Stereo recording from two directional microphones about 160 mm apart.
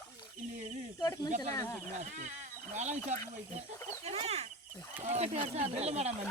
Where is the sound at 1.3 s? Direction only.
50° right (ahead or behind).